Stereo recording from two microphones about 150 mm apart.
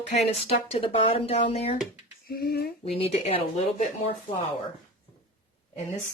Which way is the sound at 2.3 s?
90° left.